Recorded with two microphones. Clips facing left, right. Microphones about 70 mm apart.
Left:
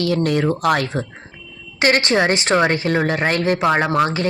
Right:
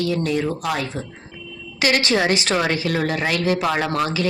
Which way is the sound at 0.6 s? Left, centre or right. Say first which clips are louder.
Left 6 dB; left.